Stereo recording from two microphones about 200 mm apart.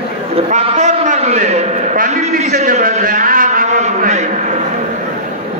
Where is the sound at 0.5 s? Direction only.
35° right (ahead or behind).